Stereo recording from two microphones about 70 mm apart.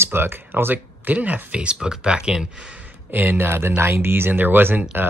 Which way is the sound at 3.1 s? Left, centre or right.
Right.